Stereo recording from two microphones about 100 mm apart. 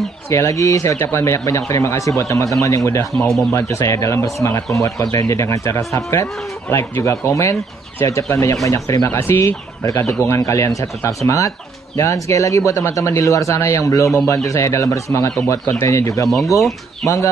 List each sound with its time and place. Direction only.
0.3 s speech: 30° left (ahead or behind)
3.2 s speech: centre (ahead or behind)
3.5 s speech: 30° left (ahead or behind)